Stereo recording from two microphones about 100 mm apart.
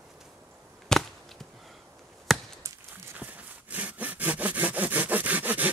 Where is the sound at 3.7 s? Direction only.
15° right (ahead or behind).